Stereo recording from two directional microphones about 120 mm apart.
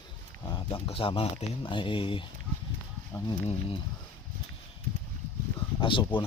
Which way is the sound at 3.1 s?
25° left (ahead or behind).